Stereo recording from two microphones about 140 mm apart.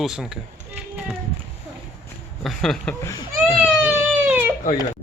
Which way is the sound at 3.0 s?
25° left (ahead or behind).